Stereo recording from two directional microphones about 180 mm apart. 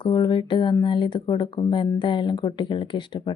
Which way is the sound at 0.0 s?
25° left (ahead or behind).